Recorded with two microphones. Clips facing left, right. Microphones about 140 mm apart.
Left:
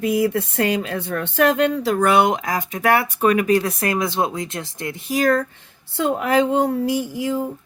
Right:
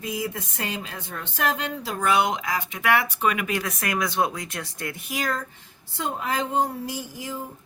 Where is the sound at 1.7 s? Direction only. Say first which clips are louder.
Left 7 dB; 65° left (ahead or behind); by 5.1 s 25° left (ahead or behind).